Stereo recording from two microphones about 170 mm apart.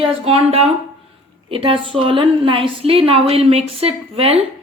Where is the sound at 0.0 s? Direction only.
35° right (ahead or behind).